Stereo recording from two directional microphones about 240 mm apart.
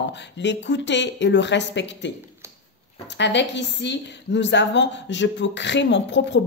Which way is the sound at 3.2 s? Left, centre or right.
Left.